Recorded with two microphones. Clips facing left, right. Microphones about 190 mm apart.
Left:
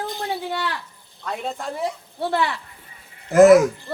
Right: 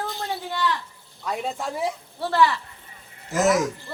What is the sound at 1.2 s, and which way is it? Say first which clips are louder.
Speech: even; 5° right (ahead or behind).